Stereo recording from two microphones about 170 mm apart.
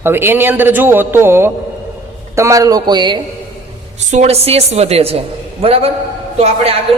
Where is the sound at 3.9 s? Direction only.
40° right (ahead or behind).